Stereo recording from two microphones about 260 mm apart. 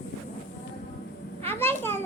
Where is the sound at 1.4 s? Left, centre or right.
Centre.